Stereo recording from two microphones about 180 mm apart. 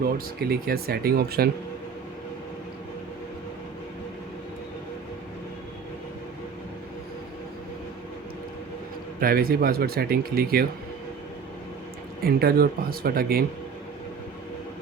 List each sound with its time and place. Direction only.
0.3 s speech: 60° right (ahead or behind)
9.2 s speech: 55° right (ahead or behind)
12.2 s speech: 55° right (ahead or behind)